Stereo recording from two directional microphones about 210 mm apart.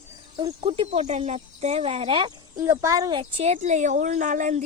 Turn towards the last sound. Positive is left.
turn(degrees=-35)  # may be behind; listen again after turning